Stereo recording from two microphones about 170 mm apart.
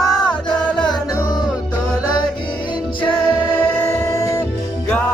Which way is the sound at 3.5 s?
15° left (ahead or behind).